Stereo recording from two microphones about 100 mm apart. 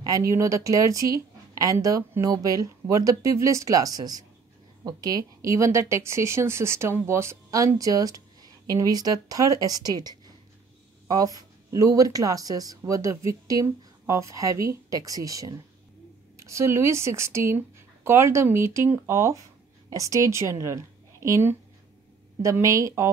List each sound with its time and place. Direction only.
0.0 s a woman's voice: 35° right (ahead or behind)